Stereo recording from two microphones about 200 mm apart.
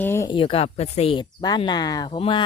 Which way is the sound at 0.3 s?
25° left (ahead or behind).